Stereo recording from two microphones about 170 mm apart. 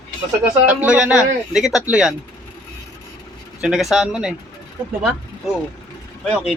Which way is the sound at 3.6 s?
Centre (ahead or behind).